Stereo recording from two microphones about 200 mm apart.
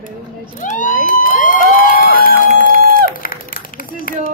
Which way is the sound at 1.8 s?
45° left (ahead or behind).